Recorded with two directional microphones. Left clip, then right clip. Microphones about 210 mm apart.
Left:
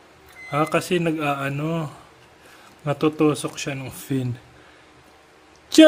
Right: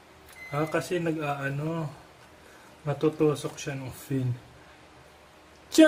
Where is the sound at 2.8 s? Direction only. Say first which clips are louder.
Left 5 dB; 55° left (ahead or behind).